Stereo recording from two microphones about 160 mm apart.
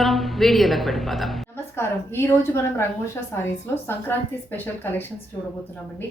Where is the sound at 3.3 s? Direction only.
15° left (ahead or behind).